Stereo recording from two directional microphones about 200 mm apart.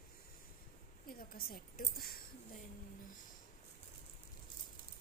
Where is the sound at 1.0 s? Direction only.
45° left (ahead or behind).